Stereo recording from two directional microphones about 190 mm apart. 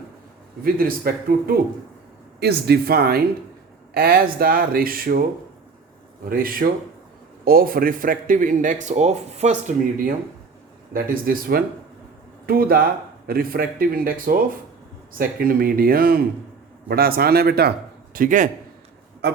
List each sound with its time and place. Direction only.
0.6 s speech: 50° right (ahead or behind)
6.2 s speech: 50° right (ahead or behind)
10.9 s speech: 50° right (ahead or behind)